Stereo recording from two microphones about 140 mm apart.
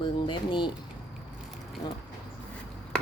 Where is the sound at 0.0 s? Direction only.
35° left (ahead or behind).